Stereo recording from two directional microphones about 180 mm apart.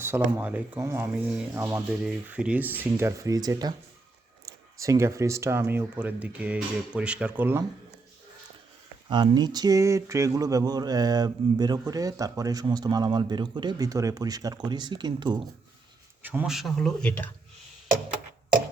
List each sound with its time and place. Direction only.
0.0 s speech: 10° right (ahead or behind)
4.5 s a sound: 20° right (ahead or behind)
4.8 s speech: 15° right (ahead or behind)
9.0 s speech: 25° right (ahead or behind)
16.2 s speech: 10° right (ahead or behind); by 17.2 s 10° left (ahead or behind)